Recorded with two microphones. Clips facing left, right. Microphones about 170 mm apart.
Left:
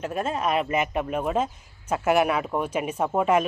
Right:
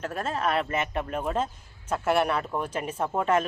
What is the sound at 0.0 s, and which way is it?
Speech, 10° left (ahead or behind).